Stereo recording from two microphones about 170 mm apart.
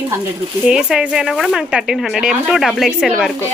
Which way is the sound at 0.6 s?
5° right (ahead or behind).